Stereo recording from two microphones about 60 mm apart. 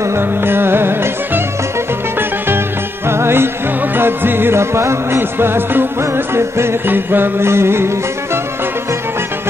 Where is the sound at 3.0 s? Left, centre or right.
Right.